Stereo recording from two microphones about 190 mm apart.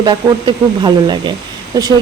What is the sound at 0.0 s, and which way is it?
A woman's voice, 25° right (ahead or behind).